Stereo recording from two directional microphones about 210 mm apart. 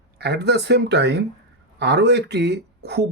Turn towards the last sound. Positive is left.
turn(degrees=-50)  # may be behind; listen again after turning